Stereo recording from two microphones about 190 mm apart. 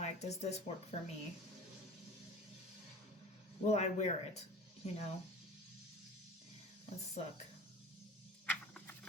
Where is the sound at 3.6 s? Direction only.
35° left (ahead or behind).